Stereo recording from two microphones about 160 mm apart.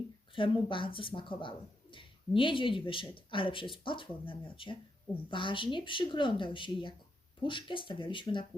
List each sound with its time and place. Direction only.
0.3 s speech: 30° left (ahead or behind)